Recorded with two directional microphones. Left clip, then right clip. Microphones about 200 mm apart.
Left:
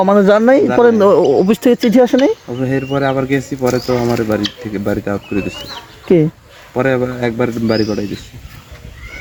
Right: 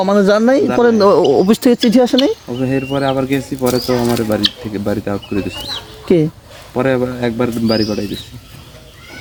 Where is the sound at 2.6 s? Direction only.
55° left (ahead or behind).